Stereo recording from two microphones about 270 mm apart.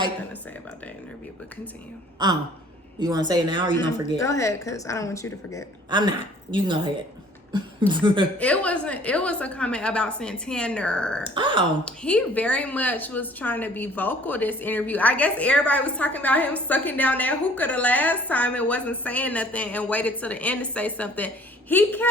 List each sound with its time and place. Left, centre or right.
2.2 s speech: centre
4.2 s a woman's voice: centre
5.9 s speech: centre
8.4 s a woman's voice: centre
11.2 s speech: centre
11.9 s a woman's voice: centre